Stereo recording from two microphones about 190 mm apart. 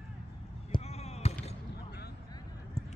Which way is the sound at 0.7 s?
35° left (ahead or behind).